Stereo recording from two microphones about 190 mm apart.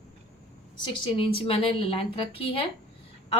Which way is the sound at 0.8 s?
30° left (ahead or behind).